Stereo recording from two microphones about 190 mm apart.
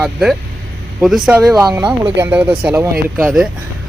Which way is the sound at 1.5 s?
20° right (ahead or behind).